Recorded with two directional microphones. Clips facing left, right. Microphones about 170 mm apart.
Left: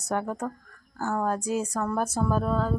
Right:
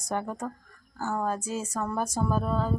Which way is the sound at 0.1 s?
5° left (ahead or behind).